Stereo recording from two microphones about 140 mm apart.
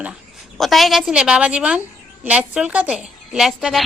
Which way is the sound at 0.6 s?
Centre (ahead or behind).